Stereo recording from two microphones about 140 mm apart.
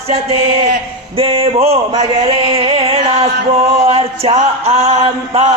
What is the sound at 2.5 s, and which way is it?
Music, 40° right (ahead or behind).